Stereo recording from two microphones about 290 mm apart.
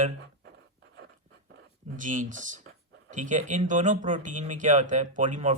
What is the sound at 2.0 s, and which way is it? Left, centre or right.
Speech, right.